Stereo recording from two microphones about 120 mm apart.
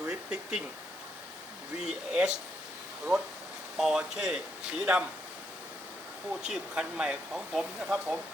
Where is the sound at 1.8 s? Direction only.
5° right (ahead or behind).